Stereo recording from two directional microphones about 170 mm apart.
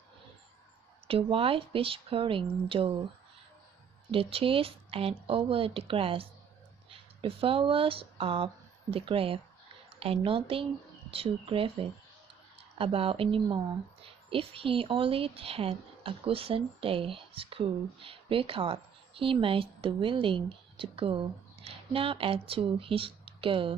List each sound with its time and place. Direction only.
1.0 s speech: 35° right (ahead or behind)
4.1 s speech: 35° right (ahead or behind)